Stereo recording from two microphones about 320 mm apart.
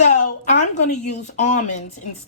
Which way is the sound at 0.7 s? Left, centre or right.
Left.